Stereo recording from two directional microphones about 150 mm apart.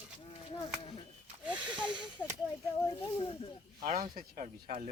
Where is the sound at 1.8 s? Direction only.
30° right (ahead or behind).